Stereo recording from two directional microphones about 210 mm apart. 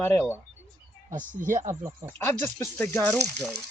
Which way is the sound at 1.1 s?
40° right (ahead or behind).